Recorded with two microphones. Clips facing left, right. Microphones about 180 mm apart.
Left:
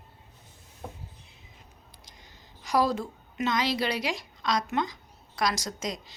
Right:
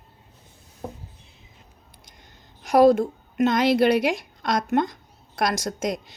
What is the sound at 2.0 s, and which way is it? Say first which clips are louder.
A woman's voice: right 3 dB; 55° right (ahead or behind).